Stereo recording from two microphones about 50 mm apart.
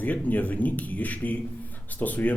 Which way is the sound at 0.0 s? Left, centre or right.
Left.